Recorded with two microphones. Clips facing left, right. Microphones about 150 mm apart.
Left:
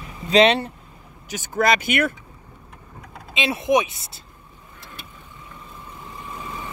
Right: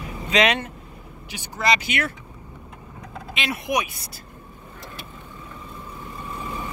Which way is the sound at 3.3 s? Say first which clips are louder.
Left 6 dB; 25° left (ahead or behind).